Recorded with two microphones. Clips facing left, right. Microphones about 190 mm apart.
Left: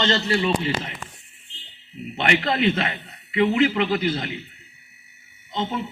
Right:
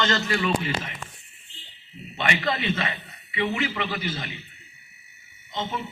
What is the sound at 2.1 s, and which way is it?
Speech, 65° left (ahead or behind).